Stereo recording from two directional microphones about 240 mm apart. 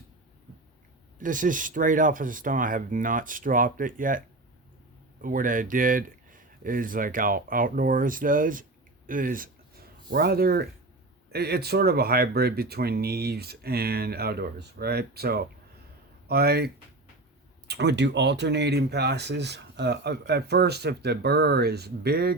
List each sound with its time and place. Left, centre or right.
1.2 s speech: right
5.2 s speech: right